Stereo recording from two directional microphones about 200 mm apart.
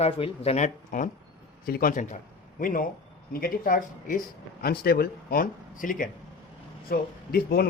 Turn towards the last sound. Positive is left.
turn(degrees=50)  # may be behind; listen again after turning